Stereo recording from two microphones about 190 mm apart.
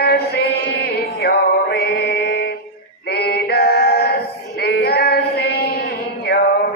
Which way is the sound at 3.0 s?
55° left (ahead or behind).